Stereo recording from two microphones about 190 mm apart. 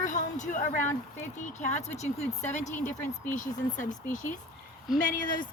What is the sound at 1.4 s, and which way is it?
Speech, 40° left (ahead or behind).